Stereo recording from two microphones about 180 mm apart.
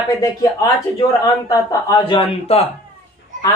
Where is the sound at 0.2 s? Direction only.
20° left (ahead or behind).